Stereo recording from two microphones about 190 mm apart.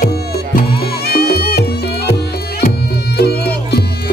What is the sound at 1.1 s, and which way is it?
Music, 55° left (ahead or behind).